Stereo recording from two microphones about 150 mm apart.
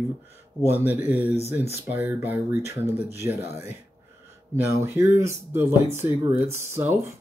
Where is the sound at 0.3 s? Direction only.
15° right (ahead or behind).